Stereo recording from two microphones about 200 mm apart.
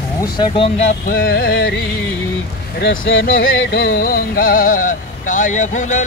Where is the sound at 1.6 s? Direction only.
65° left (ahead or behind).